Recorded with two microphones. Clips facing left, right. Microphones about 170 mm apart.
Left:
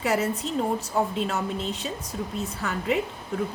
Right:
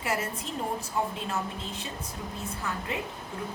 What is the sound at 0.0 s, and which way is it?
A woman's voice, 75° left (ahead or behind).